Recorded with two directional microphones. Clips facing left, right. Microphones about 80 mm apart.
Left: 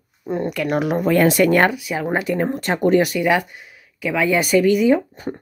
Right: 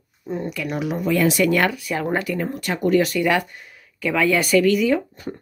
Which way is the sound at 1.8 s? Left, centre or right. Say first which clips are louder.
Left 1 dB; centre.